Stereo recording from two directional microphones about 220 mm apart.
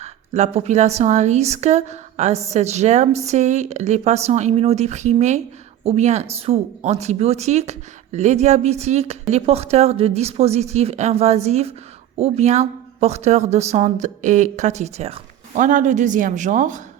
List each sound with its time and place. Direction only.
0.0 s a woman's voice: 30° right (ahead or behind)